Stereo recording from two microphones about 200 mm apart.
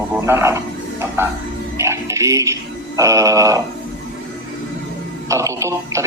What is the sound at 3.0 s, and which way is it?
Speech, 15° right (ahead or behind).